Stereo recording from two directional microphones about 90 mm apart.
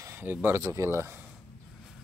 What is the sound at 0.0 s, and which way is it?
Speech, 25° right (ahead or behind).